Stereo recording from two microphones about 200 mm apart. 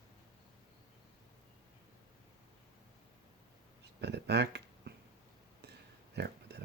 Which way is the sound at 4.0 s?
55° right (ahead or behind).